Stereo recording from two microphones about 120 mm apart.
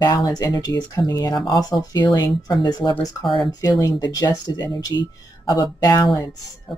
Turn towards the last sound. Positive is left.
turn(degrees=35)  # may be behind; listen again after turning